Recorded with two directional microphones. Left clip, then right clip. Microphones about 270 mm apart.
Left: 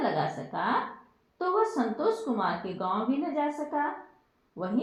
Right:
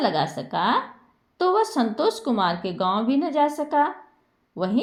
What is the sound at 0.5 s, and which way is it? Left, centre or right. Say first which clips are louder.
A woman's voice: right 7 dB; right.